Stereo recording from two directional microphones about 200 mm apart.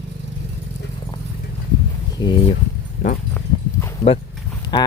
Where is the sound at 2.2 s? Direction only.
20° left (ahead or behind).